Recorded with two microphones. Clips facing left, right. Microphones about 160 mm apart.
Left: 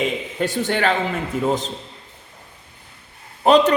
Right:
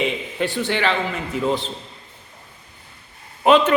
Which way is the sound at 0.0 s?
45° left (ahead or behind).